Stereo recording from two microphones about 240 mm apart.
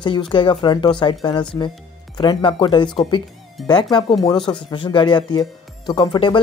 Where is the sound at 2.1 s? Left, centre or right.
Centre.